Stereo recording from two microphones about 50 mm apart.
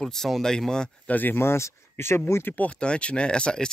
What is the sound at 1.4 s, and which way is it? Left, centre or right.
Speech, left.